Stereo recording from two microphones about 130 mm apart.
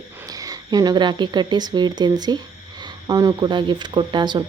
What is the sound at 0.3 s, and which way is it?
A woman's voice, 30° right (ahead or behind).